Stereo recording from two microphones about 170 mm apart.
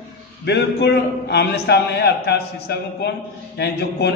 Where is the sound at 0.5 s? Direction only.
90° left.